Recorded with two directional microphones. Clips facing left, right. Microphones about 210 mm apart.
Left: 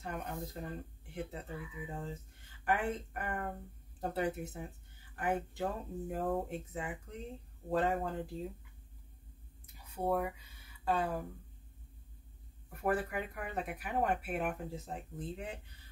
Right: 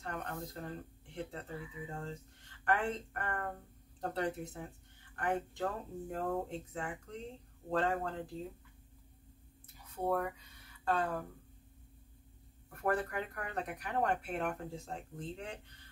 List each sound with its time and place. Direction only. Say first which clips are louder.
0.0 s speech: left 1 dB; 10° left (ahead or behind)
9.9 s speech: left 1 dB; 10° left (ahead or behind)
12.6 s speech: even; 5° left (ahead or behind)